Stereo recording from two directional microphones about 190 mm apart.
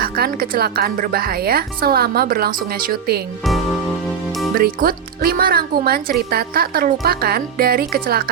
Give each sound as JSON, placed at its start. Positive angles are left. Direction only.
{"t": 0.0, "sound": "speech", "side_deg": -50}
{"t": 3.4, "sound": "music", "side_deg": 0}
{"t": 4.5, "sound": "speech", "side_deg": -50}